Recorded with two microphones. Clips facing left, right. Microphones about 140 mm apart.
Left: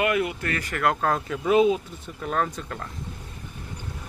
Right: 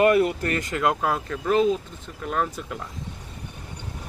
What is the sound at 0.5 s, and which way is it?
Speech, 20° right (ahead or behind).